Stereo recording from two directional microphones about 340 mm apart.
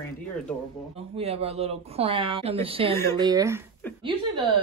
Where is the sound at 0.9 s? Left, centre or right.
Centre.